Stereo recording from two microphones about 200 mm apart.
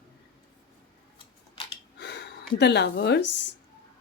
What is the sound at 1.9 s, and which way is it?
Gasp, 60° left (ahead or behind).